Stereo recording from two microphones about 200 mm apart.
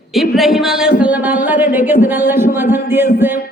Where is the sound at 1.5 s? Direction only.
10° right (ahead or behind).